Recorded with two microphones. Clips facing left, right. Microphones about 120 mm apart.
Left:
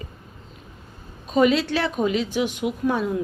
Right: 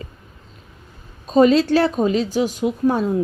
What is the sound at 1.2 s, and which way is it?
A woman's voice, 35° right (ahead or behind).